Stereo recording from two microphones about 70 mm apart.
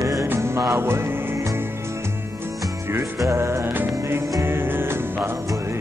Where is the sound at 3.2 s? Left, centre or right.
Right.